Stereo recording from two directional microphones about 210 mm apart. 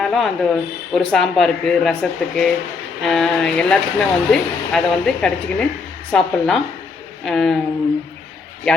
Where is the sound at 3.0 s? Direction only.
Centre (ahead or behind).